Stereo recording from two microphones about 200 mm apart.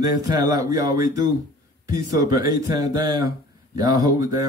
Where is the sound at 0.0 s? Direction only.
20° right (ahead or behind).